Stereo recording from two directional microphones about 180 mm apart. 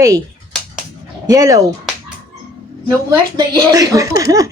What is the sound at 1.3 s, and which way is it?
Speech, 20° right (ahead or behind).